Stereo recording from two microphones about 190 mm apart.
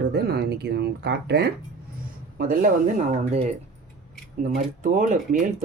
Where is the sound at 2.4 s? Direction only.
45° right (ahead or behind).